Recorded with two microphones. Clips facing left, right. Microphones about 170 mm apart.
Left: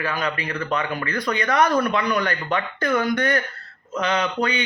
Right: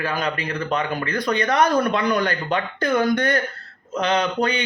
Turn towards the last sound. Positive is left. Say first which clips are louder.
# right 2 dB
turn(degrees=-35)  # may be behind; listen again after turning